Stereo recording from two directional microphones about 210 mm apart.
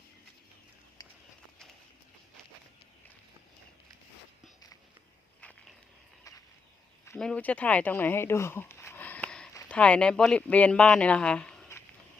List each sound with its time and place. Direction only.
7.0 s speech: 5° left (ahead or behind)